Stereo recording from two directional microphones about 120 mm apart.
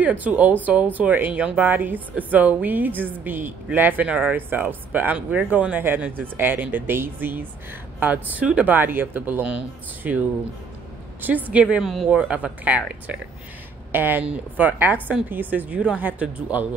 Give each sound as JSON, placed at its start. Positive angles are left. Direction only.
{"t": 0.0, "sound": "speech", "side_deg": -15}
{"t": 11.2, "sound": "speech", "side_deg": -15}